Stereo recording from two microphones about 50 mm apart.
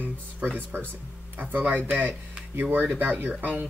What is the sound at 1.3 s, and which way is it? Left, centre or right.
Speech, right.